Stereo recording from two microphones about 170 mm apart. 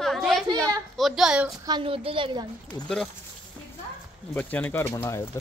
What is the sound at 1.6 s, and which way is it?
Speech, 25° right (ahead or behind).